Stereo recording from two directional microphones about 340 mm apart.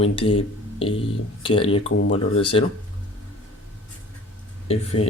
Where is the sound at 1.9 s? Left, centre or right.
Left.